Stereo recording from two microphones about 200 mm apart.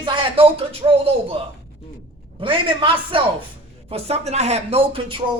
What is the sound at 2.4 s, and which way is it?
Speech, 25° right (ahead or behind).